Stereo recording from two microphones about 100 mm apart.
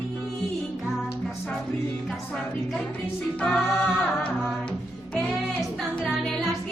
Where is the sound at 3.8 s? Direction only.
15° left (ahead or behind).